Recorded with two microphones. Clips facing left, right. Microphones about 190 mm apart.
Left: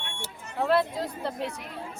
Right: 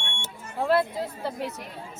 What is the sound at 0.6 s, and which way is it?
Speech, centre (ahead or behind).